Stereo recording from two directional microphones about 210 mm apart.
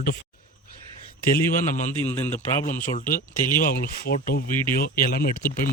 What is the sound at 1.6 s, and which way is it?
A man's voice, 40° left (ahead or behind).